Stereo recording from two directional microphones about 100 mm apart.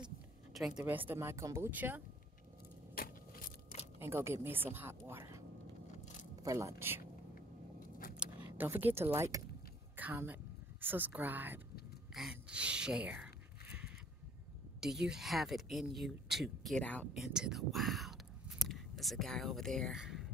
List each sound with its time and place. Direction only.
0.5 s speech: 5° right (ahead or behind)
0.8 s speech: 20° right (ahead or behind)
1.7 s speech: 15° right (ahead or behind)
4.0 s speech: 25° right (ahead or behind)
8.5 s speech: 20° right (ahead or behind)
12.1 s speech: 5° right (ahead or behind)
14.8 s speech: 5° right (ahead or behind)
16.8 s speech: 15° left (ahead or behind)
17.1 s speech: 5° right (ahead or behind)
20.0 s a sound: centre (ahead or behind)